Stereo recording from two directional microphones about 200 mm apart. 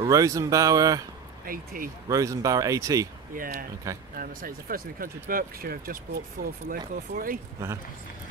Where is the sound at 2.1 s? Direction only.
15° right (ahead or behind).